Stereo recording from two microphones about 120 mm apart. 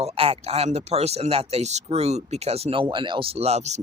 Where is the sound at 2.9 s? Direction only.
40° right (ahead or behind); by 3.7 s 65° right (ahead or behind).